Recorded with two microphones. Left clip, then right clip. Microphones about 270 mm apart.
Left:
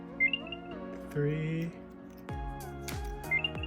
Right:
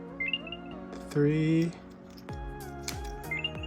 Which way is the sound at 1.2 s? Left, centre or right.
Centre.